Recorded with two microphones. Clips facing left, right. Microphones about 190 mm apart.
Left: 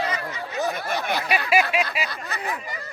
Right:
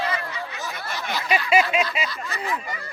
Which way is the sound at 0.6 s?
55° left (ahead or behind).